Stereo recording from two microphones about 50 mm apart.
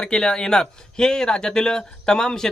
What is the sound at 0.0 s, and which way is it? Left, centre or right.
Speech, centre.